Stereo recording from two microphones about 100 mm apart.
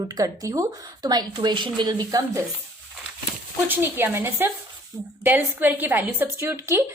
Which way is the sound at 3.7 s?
20° right (ahead or behind).